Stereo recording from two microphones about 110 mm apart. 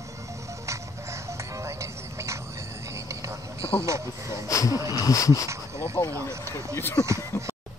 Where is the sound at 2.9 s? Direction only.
30° right (ahead or behind).